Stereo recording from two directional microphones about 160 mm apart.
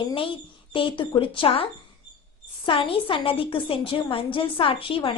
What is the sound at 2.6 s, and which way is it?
A woman's voice, 35° left (ahead or behind).